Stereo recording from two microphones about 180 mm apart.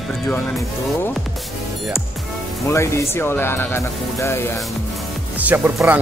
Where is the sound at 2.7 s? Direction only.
15° left (ahead or behind).